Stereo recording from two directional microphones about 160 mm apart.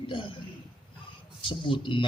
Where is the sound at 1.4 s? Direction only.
30° left (ahead or behind).